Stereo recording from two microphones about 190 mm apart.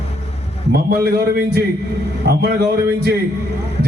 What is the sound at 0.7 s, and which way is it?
A man's voice, 55° right (ahead or behind).